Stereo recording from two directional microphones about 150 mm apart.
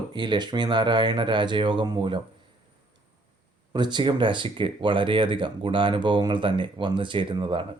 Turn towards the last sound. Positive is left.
turn(degrees=-35)  # may be behind; listen again after turning